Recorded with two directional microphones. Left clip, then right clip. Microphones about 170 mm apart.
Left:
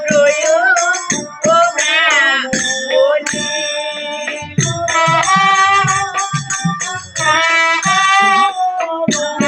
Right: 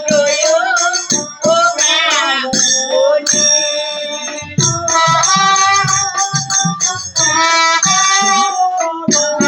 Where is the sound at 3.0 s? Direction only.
35° left (ahead or behind).